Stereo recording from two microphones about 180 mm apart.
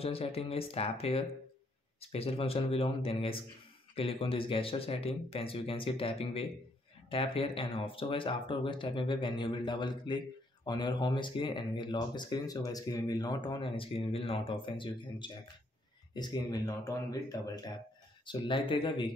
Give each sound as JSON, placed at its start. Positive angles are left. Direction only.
{"t": 0.0, "sound": "speech", "side_deg": 35}